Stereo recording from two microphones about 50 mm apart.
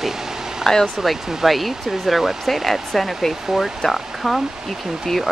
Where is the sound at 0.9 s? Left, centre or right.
Centre.